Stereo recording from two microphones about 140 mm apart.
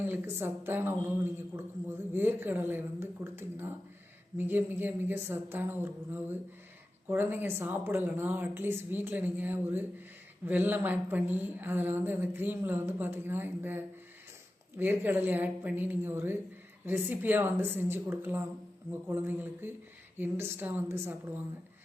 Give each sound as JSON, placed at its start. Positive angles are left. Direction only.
{"t": 0.0, "sound": "a woman's voice", "side_deg": -15}